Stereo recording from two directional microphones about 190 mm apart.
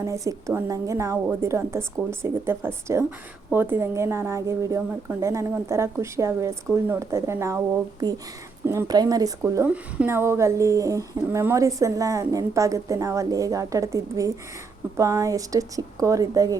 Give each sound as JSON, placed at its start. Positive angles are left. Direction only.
{"t": 0.0, "sound": "a woman's voice", "side_deg": -15}
{"t": 8.6, "sound": "a woman's voice", "side_deg": -15}